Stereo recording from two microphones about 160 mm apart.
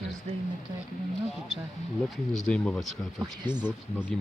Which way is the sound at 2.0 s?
Centre (ahead or behind).